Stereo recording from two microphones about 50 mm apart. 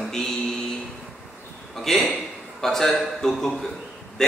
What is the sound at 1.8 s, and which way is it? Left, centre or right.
A man's voice, centre.